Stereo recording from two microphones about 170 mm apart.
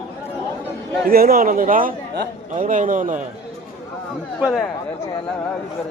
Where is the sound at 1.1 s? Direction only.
60° right (ahead or behind).